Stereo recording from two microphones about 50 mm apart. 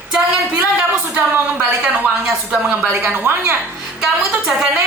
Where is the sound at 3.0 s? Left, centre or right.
Right.